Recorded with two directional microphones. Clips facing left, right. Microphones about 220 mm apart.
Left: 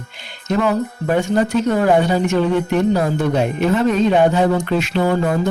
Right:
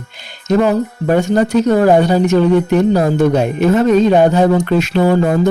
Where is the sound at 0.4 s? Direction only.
40° right (ahead or behind).